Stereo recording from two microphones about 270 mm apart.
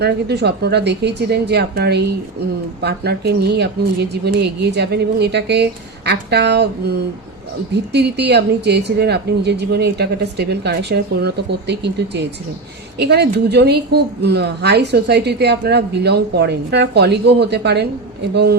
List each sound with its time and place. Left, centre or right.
0.0 s a woman's voice: right
7.9 s a woman's voice: right